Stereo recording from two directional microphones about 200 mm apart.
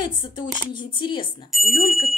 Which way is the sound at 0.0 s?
25° left (ahead or behind).